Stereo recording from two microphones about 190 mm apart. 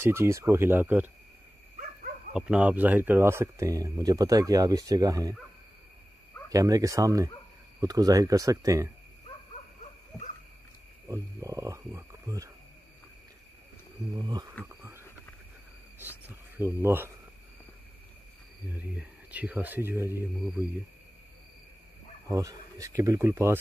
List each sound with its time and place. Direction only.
0.0 s speech: 15° right (ahead or behind)
2.3 s speech: 5° right (ahead or behind)
6.5 s speech: 20° right (ahead or behind)
11.1 s speech: 15° right (ahead or behind)
14.2 s speech: 20° right (ahead or behind)
14.8 s a sound: 15° right (ahead or behind)
16.0 s cricket: 10° right (ahead or behind)
18.7 s speech: 10° right (ahead or behind)
22.3 s speech: 20° right (ahead or behind)